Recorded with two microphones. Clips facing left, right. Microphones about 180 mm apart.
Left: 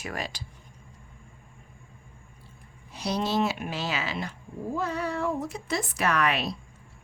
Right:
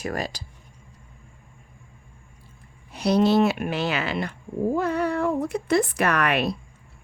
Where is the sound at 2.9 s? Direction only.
60° right (ahead or behind).